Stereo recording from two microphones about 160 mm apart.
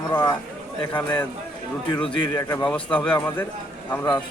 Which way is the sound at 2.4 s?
20° left (ahead or behind).